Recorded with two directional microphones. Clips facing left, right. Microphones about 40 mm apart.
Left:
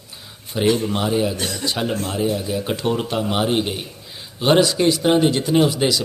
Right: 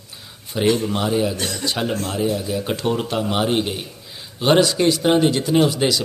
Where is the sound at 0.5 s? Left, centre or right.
Centre.